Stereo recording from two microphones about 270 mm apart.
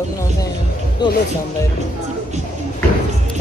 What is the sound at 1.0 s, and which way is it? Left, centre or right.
Speech, centre.